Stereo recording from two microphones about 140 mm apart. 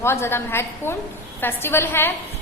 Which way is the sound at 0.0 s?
20° left (ahead or behind).